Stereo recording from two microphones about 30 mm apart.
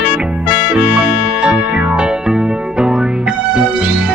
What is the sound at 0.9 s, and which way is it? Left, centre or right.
Music, right.